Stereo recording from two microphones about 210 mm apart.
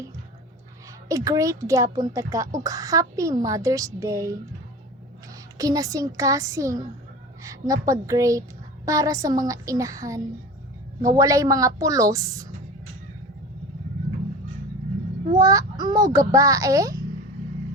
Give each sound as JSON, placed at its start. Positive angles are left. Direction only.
{"t": 1.0, "sound": "a woman's voice", "side_deg": -15}
{"t": 5.5, "sound": "a woman's voice", "side_deg": -15}
{"t": 15.4, "sound": "a woman's voice", "side_deg": -15}